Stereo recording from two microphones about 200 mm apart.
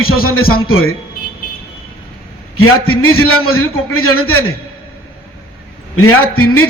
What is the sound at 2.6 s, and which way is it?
A man's voice, 90° left.